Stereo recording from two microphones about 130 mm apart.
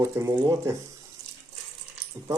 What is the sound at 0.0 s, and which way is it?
Speech, 20° right (ahead or behind).